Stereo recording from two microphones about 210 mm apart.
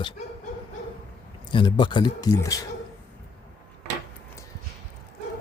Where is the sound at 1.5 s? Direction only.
20° left (ahead or behind).